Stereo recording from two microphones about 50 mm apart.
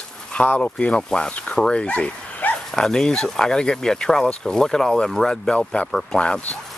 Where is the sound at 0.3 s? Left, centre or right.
Left.